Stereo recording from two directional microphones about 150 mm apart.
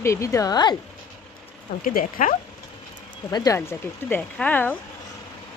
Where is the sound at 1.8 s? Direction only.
65° left (ahead or behind).